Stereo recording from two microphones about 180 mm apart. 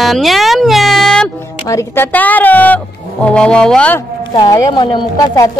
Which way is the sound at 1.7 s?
15° left (ahead or behind).